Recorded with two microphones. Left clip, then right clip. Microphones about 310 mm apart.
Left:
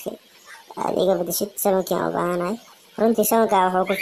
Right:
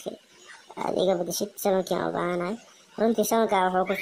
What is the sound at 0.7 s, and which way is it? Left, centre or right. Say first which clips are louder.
Speech: left 4 dB; right.